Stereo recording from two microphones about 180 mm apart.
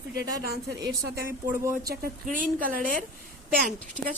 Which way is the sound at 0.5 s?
75° right (ahead or behind).